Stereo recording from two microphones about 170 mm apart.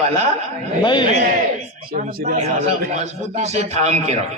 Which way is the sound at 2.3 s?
40° right (ahead or behind).